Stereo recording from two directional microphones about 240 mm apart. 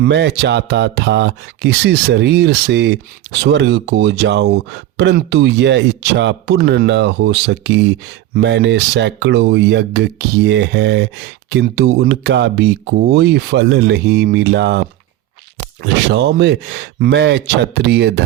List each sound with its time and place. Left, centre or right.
0.0 s speech: right